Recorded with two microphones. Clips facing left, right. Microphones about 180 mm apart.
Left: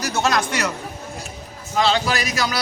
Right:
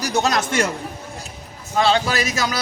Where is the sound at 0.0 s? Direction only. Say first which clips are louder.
Right 1 dB; 15° right (ahead or behind).